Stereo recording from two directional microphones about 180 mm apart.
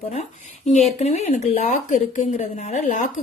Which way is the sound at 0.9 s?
40° left (ahead or behind).